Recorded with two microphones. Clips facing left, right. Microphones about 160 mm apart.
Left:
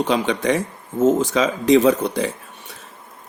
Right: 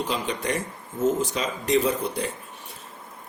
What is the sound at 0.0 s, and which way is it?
Speech, 85° left.